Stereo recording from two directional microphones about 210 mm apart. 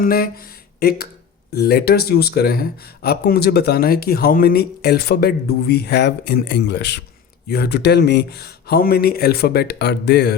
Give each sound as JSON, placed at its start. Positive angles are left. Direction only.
{"t": 0.0, "sound": "speech", "side_deg": 45}